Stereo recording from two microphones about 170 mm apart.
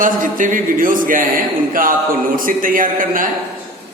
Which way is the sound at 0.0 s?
50° right (ahead or behind).